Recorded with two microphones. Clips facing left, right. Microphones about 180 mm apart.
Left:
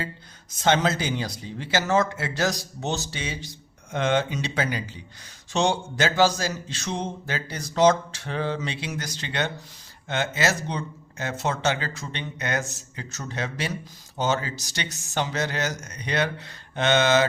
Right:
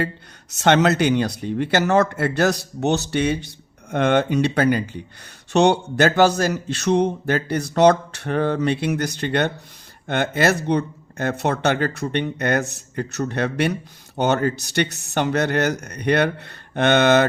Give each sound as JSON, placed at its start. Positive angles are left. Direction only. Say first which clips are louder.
{"t": 0.5, "sound": "speech", "louder": "right 6 dB", "side_deg": -70}